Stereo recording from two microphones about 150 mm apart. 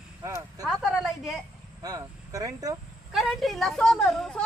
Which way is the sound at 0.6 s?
Centre (ahead or behind).